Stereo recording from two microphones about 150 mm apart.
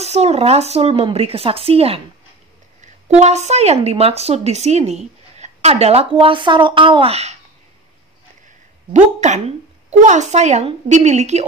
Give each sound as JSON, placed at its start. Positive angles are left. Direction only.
{"t": 0.0, "sound": "speech", "side_deg": -45}
{"t": 8.9, "sound": "speech", "side_deg": -50}